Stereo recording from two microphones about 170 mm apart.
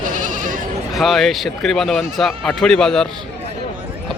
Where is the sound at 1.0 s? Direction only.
Centre (ahead or behind).